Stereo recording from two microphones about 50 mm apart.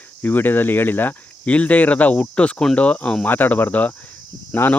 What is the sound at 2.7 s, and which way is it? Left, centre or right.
Speech, left.